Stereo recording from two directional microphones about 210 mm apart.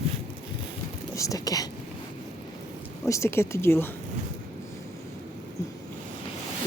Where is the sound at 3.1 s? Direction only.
10° left (ahead or behind).